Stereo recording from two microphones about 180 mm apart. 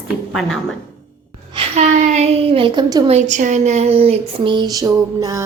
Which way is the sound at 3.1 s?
40° right (ahead or behind).